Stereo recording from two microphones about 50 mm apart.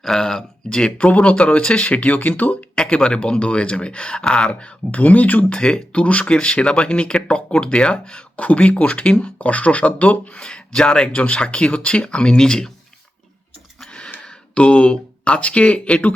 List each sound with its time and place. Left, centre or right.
0.0 s speech: centre; by 2.6 s left
2.7 s speech: centre
5.5 s speech: centre
13.9 s speech: left